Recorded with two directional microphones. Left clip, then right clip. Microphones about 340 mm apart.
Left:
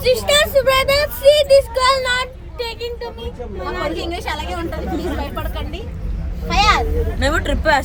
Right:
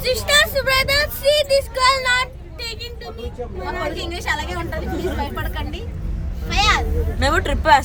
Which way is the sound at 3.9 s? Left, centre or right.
Centre.